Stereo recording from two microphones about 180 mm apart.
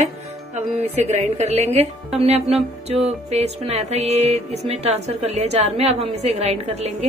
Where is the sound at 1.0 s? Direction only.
35° right (ahead or behind).